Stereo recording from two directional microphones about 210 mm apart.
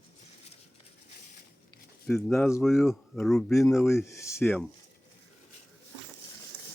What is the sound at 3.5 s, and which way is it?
Speech, 15° left (ahead or behind).